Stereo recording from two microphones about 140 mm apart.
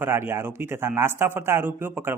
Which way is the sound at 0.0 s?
15° right (ahead or behind).